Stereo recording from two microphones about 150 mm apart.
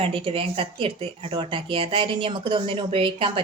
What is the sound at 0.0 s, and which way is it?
Speech, 35° right (ahead or behind).